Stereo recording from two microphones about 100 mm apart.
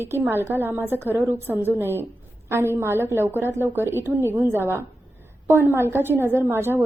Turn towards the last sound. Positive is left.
turn(degrees=-25)  # may be behind; listen again after turning